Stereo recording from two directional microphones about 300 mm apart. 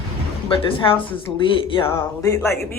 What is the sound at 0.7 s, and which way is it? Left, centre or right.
Speech, centre.